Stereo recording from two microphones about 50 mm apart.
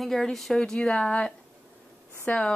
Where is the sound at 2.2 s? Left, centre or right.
Left.